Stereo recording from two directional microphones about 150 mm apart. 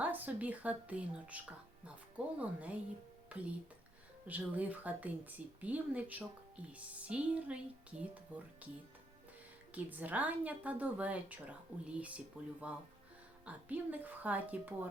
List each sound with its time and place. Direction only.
0.0 s a woman's voice: 10° right (ahead or behind)
9.7 s a woman's voice: 10° right (ahead or behind)